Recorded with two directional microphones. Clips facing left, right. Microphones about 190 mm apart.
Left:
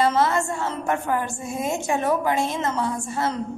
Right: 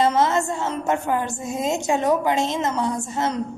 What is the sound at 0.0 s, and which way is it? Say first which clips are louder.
A woman's voice: right 1 dB; 20° right (ahead or behind).